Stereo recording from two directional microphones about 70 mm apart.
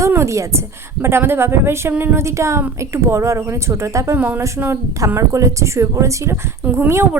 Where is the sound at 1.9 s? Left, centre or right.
Right.